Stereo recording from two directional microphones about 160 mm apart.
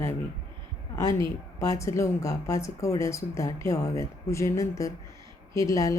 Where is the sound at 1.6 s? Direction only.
20° left (ahead or behind).